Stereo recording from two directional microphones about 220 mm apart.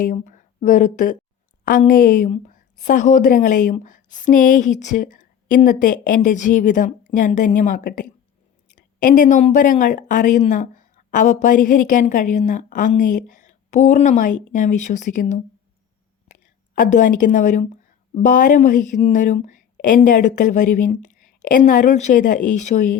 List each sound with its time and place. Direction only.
0.0 s speech: 35° left (ahead or behind)